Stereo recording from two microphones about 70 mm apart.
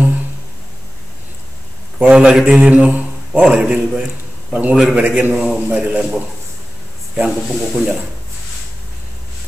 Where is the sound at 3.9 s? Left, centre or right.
Centre.